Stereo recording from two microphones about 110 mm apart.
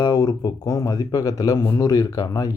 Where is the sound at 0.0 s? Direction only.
40° left (ahead or behind).